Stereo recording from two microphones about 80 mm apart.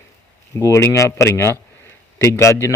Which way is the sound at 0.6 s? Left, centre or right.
Left.